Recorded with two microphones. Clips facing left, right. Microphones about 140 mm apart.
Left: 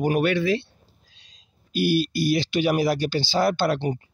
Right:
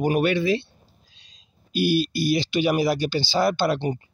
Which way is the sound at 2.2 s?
10° right (ahead or behind).